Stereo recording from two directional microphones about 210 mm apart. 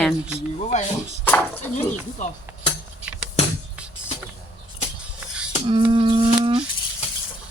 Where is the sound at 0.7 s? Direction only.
35° left (ahead or behind).